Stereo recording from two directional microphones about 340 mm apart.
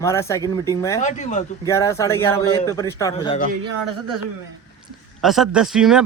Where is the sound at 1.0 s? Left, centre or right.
Left.